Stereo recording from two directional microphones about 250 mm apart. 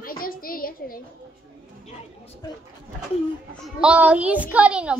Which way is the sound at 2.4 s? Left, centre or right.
Centre.